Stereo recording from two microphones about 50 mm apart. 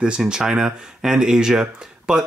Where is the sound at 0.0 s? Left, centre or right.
Centre.